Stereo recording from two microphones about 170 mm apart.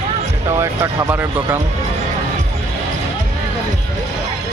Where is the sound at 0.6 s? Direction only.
15° right (ahead or behind).